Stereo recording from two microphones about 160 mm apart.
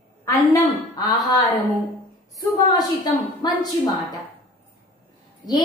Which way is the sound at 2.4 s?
25° left (ahead or behind).